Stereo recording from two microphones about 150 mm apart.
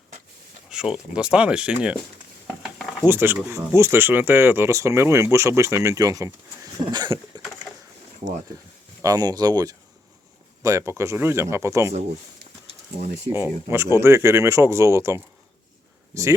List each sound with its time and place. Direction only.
0.7 s speech: 5° right (ahead or behind)
3.1 s speech: 15° right (ahead or behind)
9.0 s speech: 25° right (ahead or behind)
13.3 s speech: 15° right (ahead or behind)